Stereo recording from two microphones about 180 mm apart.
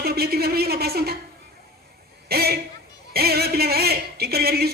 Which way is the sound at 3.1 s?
60° right (ahead or behind).